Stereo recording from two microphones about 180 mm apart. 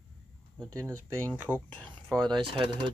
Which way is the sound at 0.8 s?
10° right (ahead or behind).